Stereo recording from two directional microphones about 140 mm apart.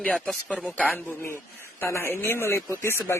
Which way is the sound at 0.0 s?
5° left (ahead or behind).